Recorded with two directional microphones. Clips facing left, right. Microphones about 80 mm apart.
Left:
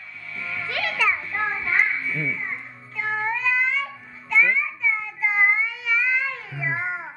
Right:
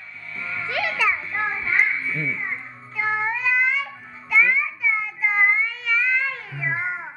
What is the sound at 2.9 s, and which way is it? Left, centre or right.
Cat, centre.